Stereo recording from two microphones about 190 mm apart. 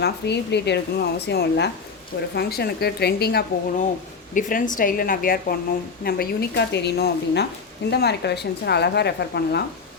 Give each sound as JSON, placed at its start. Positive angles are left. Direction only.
{"t": 0.0, "sound": "speech", "side_deg": 65}
{"t": 4.4, "sound": "speech", "side_deg": 45}